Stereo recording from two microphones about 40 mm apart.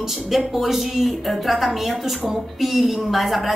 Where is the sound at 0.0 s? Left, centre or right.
Centre.